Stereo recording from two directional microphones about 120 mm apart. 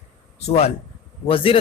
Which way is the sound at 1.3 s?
50° left (ahead or behind).